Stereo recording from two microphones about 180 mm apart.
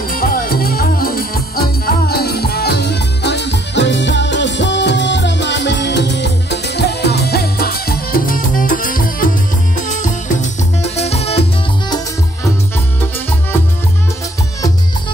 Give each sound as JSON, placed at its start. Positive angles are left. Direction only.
{"t": 0.1, "sound": "music", "side_deg": 55}